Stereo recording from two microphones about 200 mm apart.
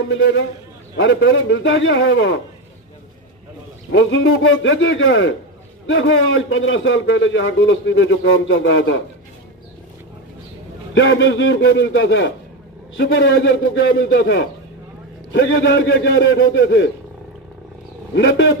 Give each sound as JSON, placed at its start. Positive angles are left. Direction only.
{"t": 0.9, "sound": "a man's voice", "side_deg": 70}
{"t": 3.9, "sound": "a man's voice", "side_deg": 80}
{"t": 11.0, "sound": "a man's voice", "side_deg": 70}
{"t": 18.1, "sound": "a man's voice", "side_deg": 70}